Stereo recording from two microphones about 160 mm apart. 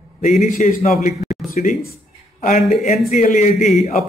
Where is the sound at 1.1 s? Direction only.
Centre (ahead or behind).